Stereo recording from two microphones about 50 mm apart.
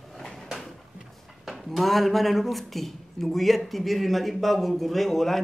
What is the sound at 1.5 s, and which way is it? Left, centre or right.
Speech, centre.